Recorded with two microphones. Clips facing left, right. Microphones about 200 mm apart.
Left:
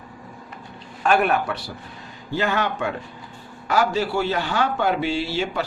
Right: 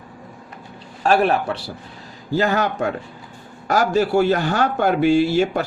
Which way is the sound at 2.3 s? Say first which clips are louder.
Right 4 dB; 40° right (ahead or behind).